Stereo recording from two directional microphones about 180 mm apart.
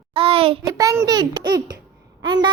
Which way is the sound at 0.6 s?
20° right (ahead or behind).